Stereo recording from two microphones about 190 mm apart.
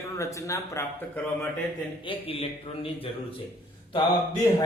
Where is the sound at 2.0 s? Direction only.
30° left (ahead or behind).